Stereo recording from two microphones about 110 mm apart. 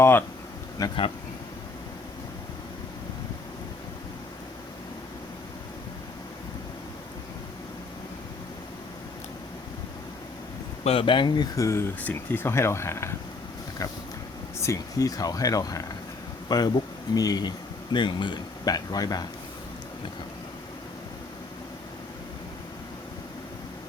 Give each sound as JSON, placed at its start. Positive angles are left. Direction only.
{"t": 0.0, "sound": "speech", "side_deg": 20}
{"t": 0.8, "sound": "speech", "side_deg": 35}
{"t": 10.8, "sound": "speech", "side_deg": 55}
{"t": 14.6, "sound": "speech", "side_deg": 30}